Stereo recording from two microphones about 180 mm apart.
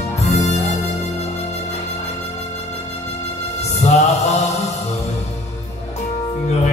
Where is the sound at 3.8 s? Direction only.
40° left (ahead or behind).